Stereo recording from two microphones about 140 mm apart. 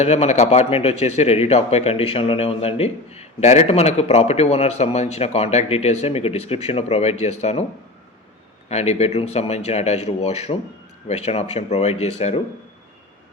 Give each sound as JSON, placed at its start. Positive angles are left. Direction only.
{"t": 0.0, "sound": "speech", "side_deg": 50}
{"t": 8.7, "sound": "speech", "side_deg": 50}